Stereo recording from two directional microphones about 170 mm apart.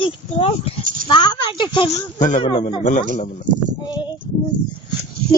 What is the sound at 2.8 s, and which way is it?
Speech, 45° left (ahead or behind).